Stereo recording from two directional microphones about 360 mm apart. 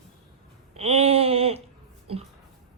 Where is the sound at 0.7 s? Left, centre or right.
Centre.